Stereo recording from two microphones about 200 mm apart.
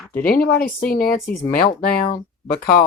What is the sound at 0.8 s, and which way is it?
Speech, 45° left (ahead or behind).